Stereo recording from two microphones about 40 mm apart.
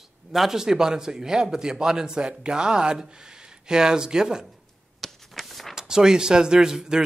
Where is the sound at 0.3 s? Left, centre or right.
Centre.